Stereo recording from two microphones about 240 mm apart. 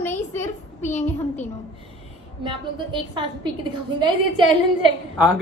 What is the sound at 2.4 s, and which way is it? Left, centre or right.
Speech, centre.